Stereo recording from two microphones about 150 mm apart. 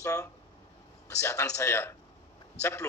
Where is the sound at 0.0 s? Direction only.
20° left (ahead or behind).